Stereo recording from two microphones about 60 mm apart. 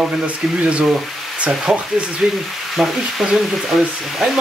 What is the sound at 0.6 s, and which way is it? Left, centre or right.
Speech, centre.